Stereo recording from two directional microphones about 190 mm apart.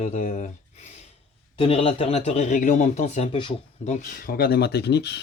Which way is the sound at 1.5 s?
30° left (ahead or behind).